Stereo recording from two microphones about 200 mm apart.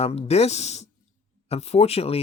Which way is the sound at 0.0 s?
30° left (ahead or behind).